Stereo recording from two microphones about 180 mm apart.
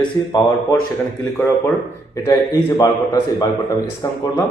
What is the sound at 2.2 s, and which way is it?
A man's voice, 20° left (ahead or behind).